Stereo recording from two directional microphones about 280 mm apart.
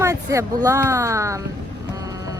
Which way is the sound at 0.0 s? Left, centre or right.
Centre.